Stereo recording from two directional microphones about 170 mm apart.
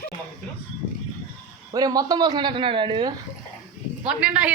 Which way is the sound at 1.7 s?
20° right (ahead or behind).